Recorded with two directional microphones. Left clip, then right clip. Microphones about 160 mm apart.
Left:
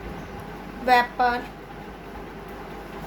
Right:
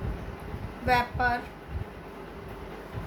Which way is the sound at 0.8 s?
30° left (ahead or behind).